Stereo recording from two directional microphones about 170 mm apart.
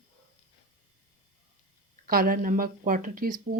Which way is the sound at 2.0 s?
60° right (ahead or behind).